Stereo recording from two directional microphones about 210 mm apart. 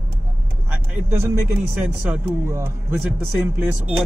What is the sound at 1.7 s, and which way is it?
A man's voice, 10° right (ahead or behind).